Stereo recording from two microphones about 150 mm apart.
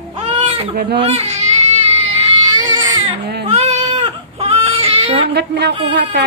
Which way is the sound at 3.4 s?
45° right (ahead or behind).